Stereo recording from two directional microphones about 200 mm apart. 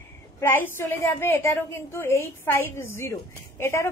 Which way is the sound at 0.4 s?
10° left (ahead or behind).